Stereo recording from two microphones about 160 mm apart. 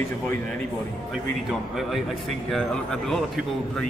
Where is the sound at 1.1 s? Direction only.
5° right (ahead or behind).